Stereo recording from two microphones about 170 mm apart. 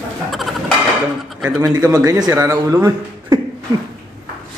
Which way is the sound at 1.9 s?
20° right (ahead or behind).